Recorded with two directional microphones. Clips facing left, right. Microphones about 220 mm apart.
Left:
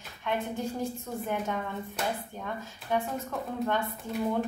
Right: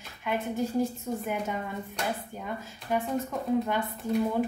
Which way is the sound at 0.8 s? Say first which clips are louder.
Right 5 dB; 10° right (ahead or behind).